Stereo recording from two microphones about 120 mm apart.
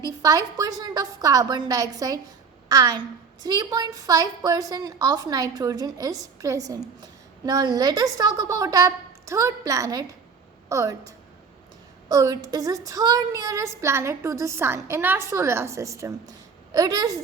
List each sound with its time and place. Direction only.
0.0 s a woman's voice: 30° right (ahead or behind)